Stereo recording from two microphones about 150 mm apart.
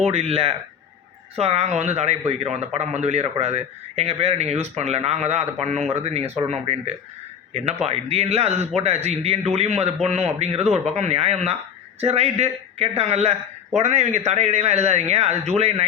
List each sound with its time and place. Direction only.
0.0 s a man's voice: 45° right (ahead or behind)